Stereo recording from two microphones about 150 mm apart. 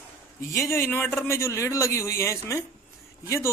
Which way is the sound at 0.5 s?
20° left (ahead or behind).